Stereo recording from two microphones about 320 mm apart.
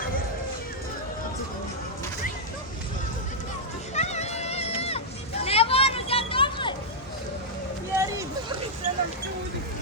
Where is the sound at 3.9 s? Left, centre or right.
Left.